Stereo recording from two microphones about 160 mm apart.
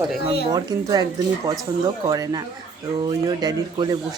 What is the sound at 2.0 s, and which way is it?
Speech, 25° right (ahead or behind).